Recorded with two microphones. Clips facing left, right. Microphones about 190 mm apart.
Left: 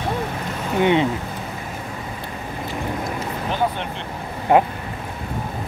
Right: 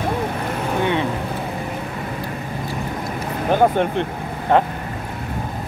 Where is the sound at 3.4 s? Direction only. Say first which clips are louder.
Right 8 dB; 50° right (ahead or behind).